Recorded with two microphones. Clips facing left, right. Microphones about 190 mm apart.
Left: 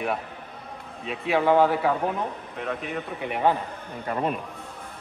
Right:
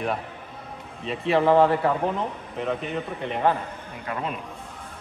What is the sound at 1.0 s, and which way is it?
Speech, centre (ahead or behind).